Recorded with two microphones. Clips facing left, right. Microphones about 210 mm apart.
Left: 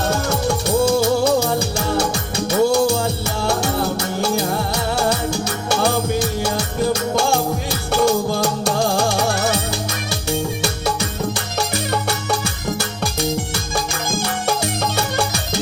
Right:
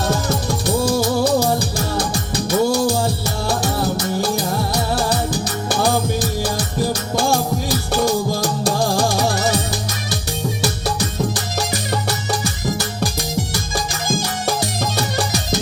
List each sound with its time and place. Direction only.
0.1 s music: 35° right (ahead or behind)
10.6 s music: 35° right (ahead or behind)